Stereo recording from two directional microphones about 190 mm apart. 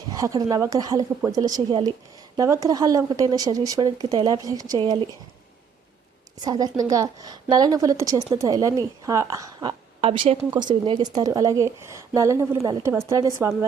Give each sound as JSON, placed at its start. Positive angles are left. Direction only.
{"t": 0.2, "sound": "a woman's voice", "side_deg": -20}
{"t": 6.4, "sound": "a woman's voice", "side_deg": -20}